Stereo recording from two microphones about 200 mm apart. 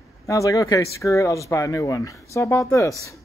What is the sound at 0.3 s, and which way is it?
Speech, 15° left (ahead or behind).